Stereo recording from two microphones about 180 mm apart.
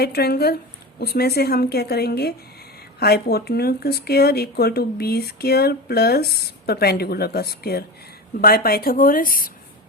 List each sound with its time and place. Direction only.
0.0 s speech: 60° left (ahead or behind)